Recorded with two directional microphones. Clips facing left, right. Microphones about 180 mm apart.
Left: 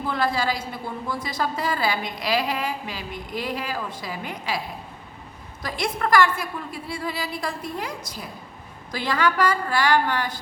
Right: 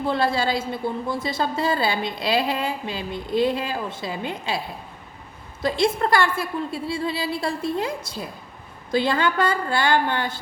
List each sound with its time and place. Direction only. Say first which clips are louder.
0.1 s a woman's voice: right 2 dB; 25° right (ahead or behind)
5.6 s a woman's voice: right 6 dB; 30° right (ahead or behind)